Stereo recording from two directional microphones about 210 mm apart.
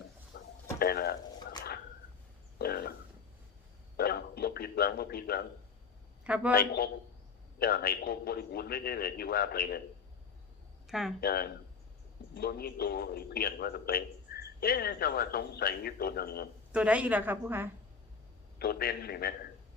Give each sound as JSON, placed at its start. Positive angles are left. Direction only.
{"t": 0.3, "sound": "a sound", "side_deg": 45}
{"t": 2.6, "sound": "a sound", "side_deg": 45}
{"t": 3.9, "sound": "a sound", "side_deg": 45}
{"t": 6.2, "sound": "a man's voice", "side_deg": -5}
{"t": 6.5, "sound": "a man's voice", "side_deg": 45}
{"t": 10.8, "sound": "speech", "side_deg": 0}
{"t": 11.2, "sound": "a man's voice", "side_deg": 45}
{"t": 16.7, "sound": "a woman's voice", "side_deg": -5}
{"t": 18.6, "sound": "a man's voice", "side_deg": 45}